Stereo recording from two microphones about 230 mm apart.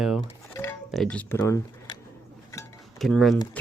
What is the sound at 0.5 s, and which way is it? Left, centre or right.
Music, centre.